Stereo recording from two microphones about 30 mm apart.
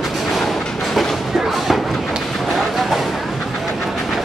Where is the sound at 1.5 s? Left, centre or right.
Centre.